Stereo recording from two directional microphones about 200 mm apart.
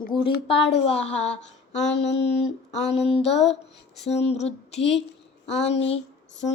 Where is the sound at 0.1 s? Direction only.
Centre (ahead or behind).